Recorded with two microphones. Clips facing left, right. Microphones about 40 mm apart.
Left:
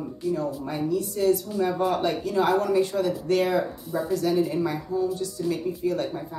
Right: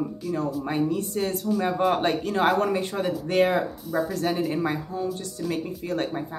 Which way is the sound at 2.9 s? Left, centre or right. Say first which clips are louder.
Left 2 dB; right.